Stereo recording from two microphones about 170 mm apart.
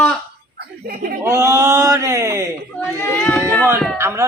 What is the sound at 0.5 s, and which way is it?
Speech, 60° right (ahead or behind).